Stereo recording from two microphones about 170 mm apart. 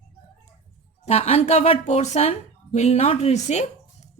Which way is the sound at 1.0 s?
40° left (ahead or behind).